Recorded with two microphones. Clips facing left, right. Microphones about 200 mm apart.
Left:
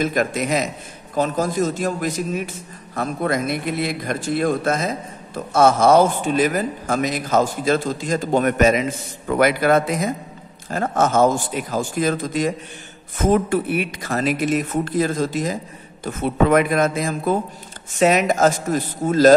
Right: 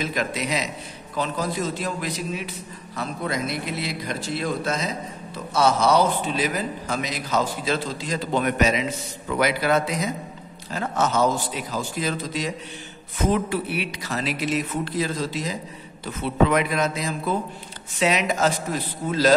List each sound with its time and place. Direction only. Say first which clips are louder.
0.0 s a man's voice: left 6 dB; 50° left (ahead or behind)